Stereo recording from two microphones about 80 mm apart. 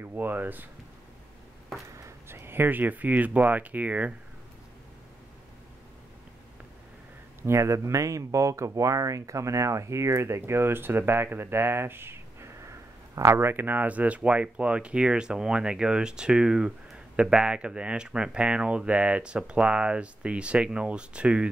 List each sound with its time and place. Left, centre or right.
0.0 s speech: right
2.0 s speech: right
7.4 s speech: right; by 21.5 s centre